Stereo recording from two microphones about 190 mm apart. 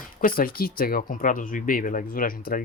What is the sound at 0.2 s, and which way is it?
Speech, 50° left (ahead or behind).